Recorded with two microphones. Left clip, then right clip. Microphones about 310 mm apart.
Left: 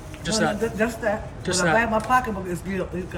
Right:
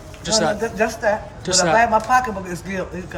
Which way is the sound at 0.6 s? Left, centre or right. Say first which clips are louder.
Right 4 dB; right.